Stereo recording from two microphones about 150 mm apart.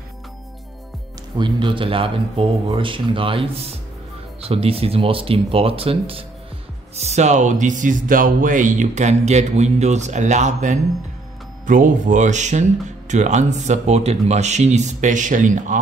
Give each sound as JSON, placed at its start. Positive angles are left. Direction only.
{"t": 1.4, "sound": "speech", "side_deg": -35}